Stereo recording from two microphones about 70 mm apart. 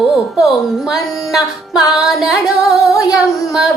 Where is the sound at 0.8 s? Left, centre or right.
Centre.